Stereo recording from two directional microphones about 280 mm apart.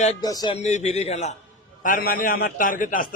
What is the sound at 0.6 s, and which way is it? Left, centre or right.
A man's voice, left.